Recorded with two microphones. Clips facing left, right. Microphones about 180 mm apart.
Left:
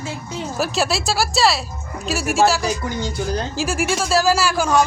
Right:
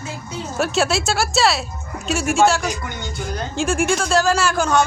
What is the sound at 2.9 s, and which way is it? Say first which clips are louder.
Speech: left 6 dB; 35° left (ahead or behind).